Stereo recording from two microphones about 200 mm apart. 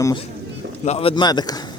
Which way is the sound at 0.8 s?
30° left (ahead or behind).